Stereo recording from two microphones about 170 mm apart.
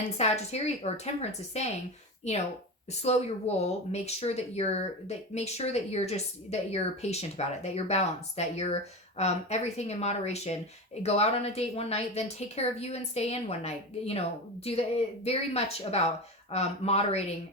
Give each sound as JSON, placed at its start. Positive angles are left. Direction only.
{"t": 0.2, "sound": "speech", "side_deg": 40}